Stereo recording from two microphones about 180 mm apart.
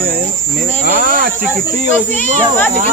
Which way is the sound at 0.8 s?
50° right (ahead or behind).